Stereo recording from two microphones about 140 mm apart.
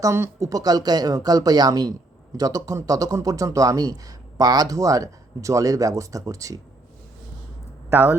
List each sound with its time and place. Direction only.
0.0 s a man's voice: 20° right (ahead or behind)